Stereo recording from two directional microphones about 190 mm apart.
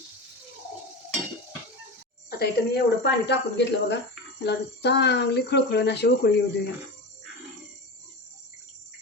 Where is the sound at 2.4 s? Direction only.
60° left (ahead or behind).